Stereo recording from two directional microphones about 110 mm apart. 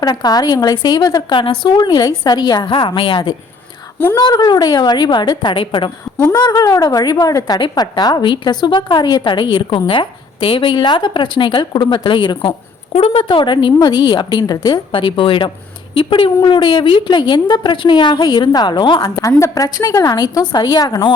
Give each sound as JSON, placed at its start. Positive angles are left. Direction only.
{"t": 0.0, "sound": "a woman's voice", "side_deg": 35}
{"t": 6.3, "sound": "a woman's voice", "side_deg": 35}
{"t": 12.9, "sound": "a woman's voice", "side_deg": 60}
{"t": 14.9, "sound": "a woman's voice", "side_deg": 50}
{"t": 19.4, "sound": "a woman's voice", "side_deg": 30}